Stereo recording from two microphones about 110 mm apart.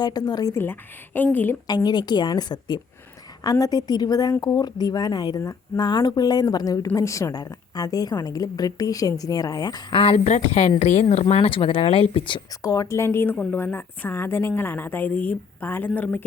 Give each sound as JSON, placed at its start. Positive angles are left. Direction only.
{"t": 0.0, "sound": "a woman's voice", "side_deg": 40}
{"t": 0.6, "sound": "a woman's voice", "side_deg": 20}
{"t": 1.6, "sound": "a woman's voice", "side_deg": 40}
{"t": 9.9, "sound": "speech", "side_deg": 55}
{"t": 12.6, "sound": "a woman's voice", "side_deg": 35}
{"t": 13.3, "sound": "a woman's voice", "side_deg": 5}
{"t": 13.6, "sound": "a woman's voice", "side_deg": 20}